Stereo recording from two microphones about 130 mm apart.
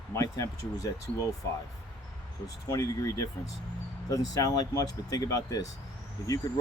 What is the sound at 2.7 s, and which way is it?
Speech, 25° left (ahead or behind).